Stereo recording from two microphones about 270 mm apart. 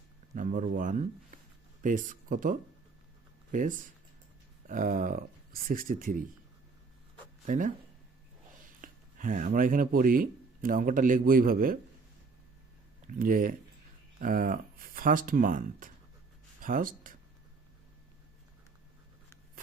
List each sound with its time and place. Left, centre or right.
0.3 s speech: right
7.4 s speech: right
13.1 s speech: right